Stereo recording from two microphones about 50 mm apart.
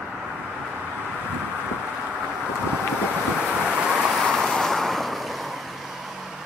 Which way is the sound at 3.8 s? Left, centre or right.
Centre.